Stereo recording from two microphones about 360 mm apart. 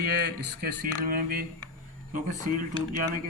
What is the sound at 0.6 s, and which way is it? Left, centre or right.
Speech, right.